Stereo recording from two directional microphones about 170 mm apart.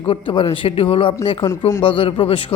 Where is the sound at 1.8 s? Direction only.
30° left (ahead or behind).